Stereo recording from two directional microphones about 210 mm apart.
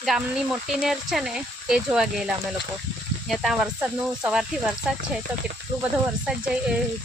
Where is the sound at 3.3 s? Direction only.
Centre (ahead or behind).